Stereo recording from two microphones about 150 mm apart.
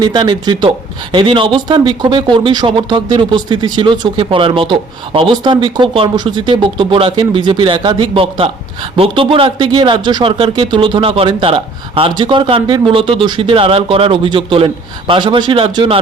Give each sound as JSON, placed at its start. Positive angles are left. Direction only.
{"t": 0.0, "sound": "speech", "side_deg": -30}